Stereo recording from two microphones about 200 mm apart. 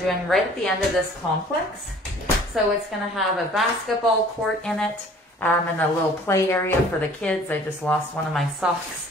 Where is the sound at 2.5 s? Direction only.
Centre (ahead or behind).